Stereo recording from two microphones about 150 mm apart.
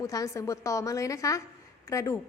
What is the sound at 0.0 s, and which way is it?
A woman's voice, 20° left (ahead or behind).